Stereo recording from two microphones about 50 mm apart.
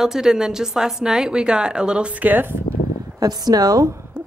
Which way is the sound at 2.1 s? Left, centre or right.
Right.